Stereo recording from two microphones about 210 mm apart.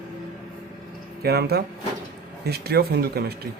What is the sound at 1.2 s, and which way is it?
Speech, 50° right (ahead or behind).